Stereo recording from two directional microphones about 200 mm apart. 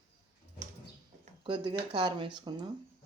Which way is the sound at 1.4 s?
25° right (ahead or behind).